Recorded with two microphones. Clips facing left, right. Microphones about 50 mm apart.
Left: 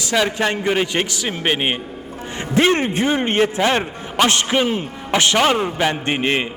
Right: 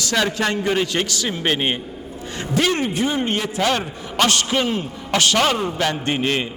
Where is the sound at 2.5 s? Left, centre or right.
Left.